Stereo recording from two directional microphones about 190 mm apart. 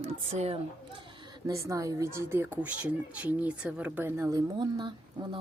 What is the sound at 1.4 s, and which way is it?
Speech, 15° right (ahead or behind).